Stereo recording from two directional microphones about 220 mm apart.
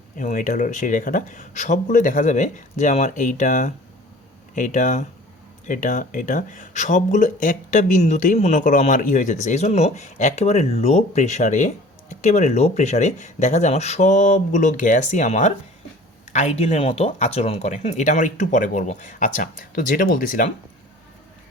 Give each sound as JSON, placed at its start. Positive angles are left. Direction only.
{"t": 0.2, "sound": "speech", "side_deg": 35}